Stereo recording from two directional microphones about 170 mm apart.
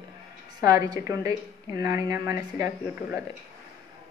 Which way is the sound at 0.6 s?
20° right (ahead or behind).